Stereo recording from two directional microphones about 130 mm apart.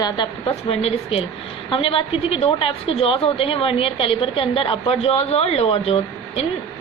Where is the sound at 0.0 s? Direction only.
40° left (ahead or behind).